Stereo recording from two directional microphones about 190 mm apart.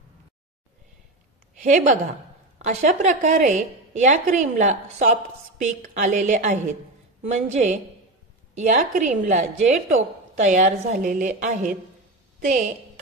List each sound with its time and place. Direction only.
1.6 s a woman's voice: 40° right (ahead or behind)